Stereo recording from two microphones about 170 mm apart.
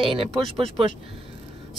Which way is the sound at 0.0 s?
35° right (ahead or behind).